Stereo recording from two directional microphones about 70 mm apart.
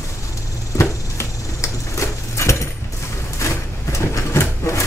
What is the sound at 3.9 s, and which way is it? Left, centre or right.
Bird, left.